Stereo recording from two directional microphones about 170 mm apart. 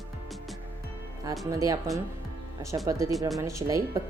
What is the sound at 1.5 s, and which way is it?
A woman's voice, 20° right (ahead or behind).